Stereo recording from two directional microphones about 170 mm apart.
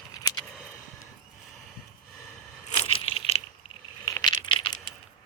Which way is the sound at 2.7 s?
35° left (ahead or behind).